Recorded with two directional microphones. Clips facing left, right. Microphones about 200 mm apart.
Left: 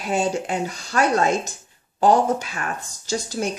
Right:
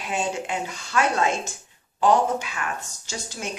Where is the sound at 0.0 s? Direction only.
40° left (ahead or behind).